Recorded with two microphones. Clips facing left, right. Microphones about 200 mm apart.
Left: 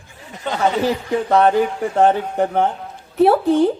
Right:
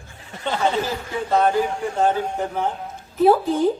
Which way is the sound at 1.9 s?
65° left (ahead or behind).